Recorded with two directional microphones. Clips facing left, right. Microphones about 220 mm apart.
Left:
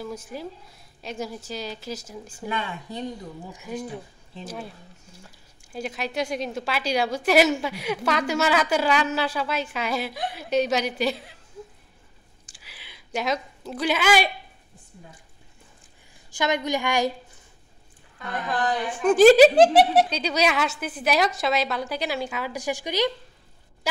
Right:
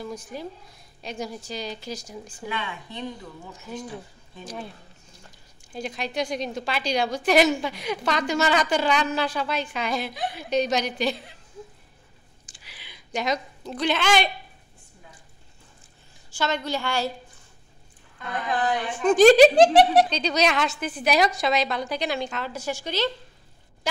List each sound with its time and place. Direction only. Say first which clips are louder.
0.0 s speech: even; 5° left (ahead or behind)
2.4 s speech: left 3 dB; 40° left (ahead or behind)
5.1 s speech: left 2 dB; 5° left (ahead or behind)
12.4 s a sound: even; 5° left (ahead or behind)
16.3 s a woman's voice: left 2 dB; 15° left (ahead or behind)
18.9 s speech: left 1 dB; 5° left (ahead or behind)